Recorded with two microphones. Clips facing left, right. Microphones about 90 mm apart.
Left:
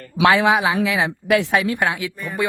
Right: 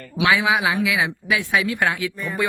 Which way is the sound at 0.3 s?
50° left (ahead or behind).